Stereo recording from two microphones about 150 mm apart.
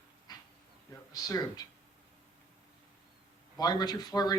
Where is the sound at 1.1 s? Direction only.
25° left (ahead or behind).